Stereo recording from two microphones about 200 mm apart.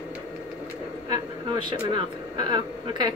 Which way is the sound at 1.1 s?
20° right (ahead or behind).